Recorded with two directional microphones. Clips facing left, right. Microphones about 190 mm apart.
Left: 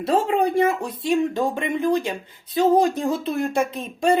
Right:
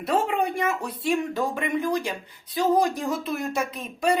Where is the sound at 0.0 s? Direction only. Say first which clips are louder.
Left 4 dB; 30° left (ahead or behind).